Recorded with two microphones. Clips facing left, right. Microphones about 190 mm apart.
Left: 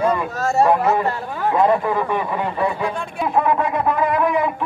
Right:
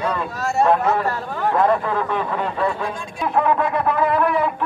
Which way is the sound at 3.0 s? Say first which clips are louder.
Left 4 dB; 60° left (ahead or behind).